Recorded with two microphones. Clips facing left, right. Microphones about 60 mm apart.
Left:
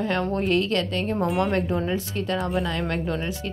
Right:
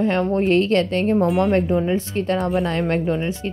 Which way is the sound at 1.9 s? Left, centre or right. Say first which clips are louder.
Right 5 dB; right.